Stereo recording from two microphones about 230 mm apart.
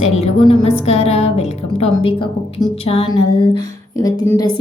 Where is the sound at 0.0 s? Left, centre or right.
Left.